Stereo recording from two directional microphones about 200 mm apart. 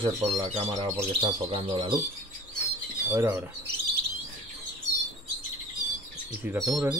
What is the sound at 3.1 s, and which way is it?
Speech, 15° right (ahead or behind).